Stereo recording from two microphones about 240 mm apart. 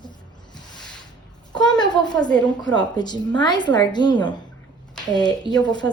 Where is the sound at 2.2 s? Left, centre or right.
Centre.